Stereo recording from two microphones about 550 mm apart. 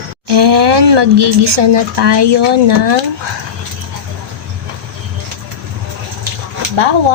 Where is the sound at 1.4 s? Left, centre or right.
Right.